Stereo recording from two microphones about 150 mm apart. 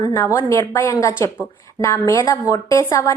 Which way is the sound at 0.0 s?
20° left (ahead or behind).